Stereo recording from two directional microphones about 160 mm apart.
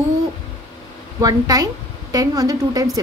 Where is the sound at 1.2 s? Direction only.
25° right (ahead or behind).